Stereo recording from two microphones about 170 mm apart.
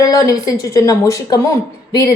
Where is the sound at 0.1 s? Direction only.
20° left (ahead or behind).